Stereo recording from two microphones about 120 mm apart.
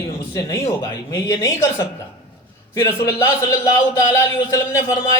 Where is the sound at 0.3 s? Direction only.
25° left (ahead or behind).